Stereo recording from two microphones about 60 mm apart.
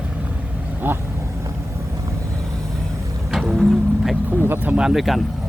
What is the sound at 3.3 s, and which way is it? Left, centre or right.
Music, centre.